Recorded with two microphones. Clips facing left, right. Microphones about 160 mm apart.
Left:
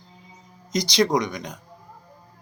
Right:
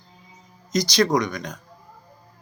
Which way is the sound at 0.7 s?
20° left (ahead or behind).